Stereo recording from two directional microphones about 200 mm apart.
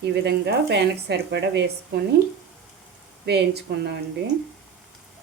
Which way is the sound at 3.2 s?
55° right (ahead or behind).